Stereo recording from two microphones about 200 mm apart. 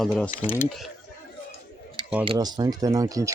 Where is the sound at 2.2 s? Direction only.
20° right (ahead or behind).